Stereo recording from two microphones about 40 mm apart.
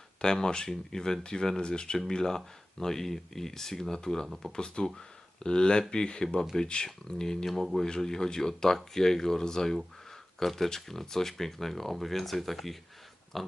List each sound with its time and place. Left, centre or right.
0.2 s speech: centre
13.3 s pig: centre